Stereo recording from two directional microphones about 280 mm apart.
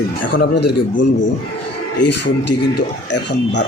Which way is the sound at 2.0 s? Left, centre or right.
Left.